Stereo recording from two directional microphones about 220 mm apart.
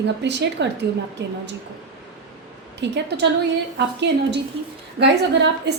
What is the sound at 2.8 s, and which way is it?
Speech, 50° right (ahead or behind).